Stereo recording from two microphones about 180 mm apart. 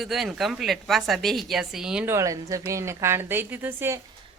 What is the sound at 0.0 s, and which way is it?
Speech, centre (ahead or behind).